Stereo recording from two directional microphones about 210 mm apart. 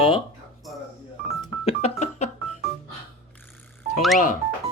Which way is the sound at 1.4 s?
30° left (ahead or behind).